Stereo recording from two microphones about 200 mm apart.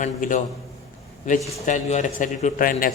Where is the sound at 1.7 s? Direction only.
35° left (ahead or behind).